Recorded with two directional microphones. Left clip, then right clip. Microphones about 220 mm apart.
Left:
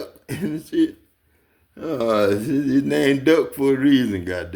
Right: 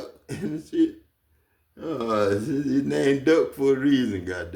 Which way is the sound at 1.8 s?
35° left (ahead or behind).